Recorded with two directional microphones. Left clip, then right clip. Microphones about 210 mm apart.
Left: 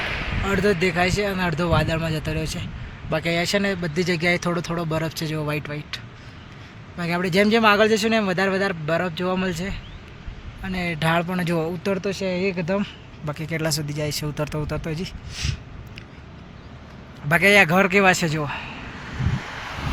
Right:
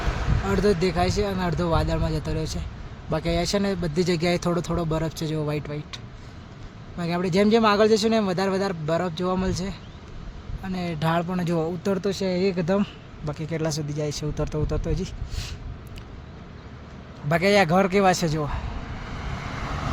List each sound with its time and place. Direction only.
0.0 s a sound: 35° right (ahead or behind)
0.4 s speech: centre (ahead or behind)
7.0 s speech: 5° right (ahead or behind); by 12.9 s 25° right (ahead or behind)
13.2 s speech: centre (ahead or behind)
17.2 s speech: 5° right (ahead or behind)